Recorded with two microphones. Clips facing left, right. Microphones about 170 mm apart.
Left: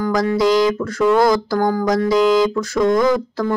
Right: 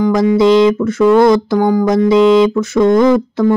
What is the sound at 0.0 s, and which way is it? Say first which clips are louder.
Music: right 6 dB; 25° right (ahead or behind).